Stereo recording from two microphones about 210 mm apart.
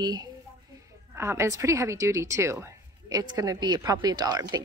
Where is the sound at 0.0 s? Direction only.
20° right (ahead or behind).